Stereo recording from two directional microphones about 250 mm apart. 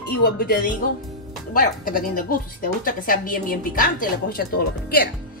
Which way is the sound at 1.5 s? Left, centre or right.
Left.